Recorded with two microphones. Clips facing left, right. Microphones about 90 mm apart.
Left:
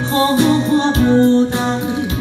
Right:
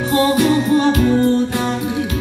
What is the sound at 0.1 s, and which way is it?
Music, 25° left (ahead or behind).